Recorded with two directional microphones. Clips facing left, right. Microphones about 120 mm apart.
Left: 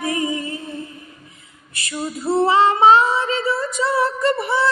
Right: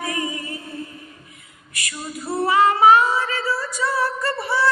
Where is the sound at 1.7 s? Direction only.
25° left (ahead or behind).